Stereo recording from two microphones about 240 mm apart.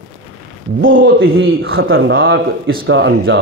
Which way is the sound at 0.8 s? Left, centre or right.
Right.